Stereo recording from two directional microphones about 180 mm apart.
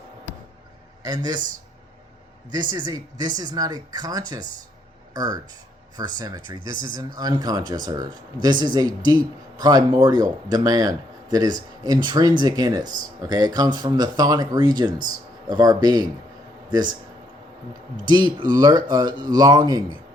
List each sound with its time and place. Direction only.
1.0 s speech: 20° right (ahead or behind)
2.5 s speech: 25° right (ahead or behind)
18.1 s speech: 25° right (ahead or behind)